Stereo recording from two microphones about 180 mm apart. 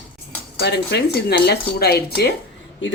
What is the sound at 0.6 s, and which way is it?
Speech, 65° left (ahead or behind).